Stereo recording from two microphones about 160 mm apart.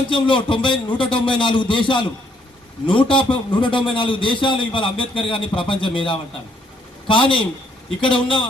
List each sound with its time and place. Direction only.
0.1 s a man's voice: 30° left (ahead or behind)